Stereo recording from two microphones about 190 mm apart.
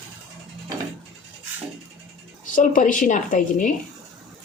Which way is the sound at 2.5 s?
45° left (ahead or behind).